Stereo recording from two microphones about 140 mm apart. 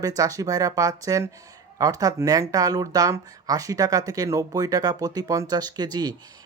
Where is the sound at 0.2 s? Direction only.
25° right (ahead or behind).